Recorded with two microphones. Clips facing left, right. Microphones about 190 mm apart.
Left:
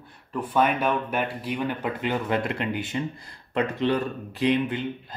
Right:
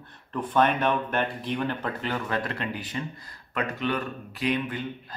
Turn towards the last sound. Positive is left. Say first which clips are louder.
# left 4 dB
turn(degrees=25)  # may be behind; listen again after turning